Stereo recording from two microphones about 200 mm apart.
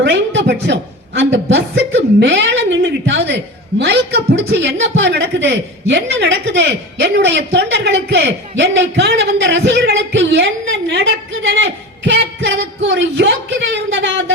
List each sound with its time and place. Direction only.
0.0 s a woman's voice: 65° right (ahead or behind)